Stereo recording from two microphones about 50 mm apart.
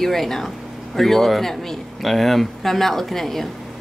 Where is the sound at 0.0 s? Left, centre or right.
Centre.